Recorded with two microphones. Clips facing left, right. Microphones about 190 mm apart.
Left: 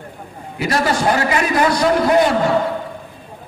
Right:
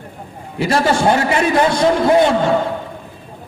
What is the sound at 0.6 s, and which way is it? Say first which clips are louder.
A man's voice: right 3 dB; 25° right (ahead or behind).